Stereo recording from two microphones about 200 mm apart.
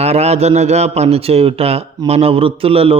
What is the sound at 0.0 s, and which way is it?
Speech, 30° right (ahead or behind).